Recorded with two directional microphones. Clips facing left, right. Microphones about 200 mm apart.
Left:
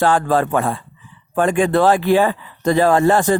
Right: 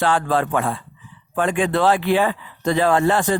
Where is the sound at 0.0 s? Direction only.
45° left (ahead or behind).